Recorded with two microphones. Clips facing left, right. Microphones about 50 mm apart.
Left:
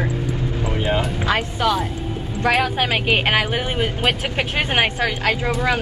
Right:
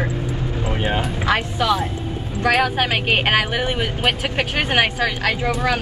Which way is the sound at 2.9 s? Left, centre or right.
Centre.